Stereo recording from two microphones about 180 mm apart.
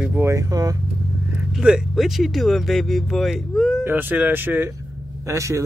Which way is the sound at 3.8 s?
10° right (ahead or behind).